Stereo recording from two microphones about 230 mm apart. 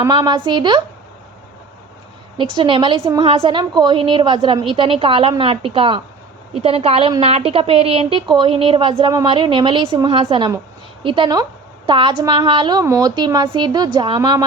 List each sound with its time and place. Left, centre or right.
0.0 s a woman's voice: centre
2.4 s a woman's voice: right